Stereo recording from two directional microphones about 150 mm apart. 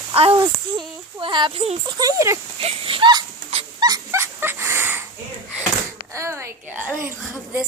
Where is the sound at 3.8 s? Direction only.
25° right (ahead or behind).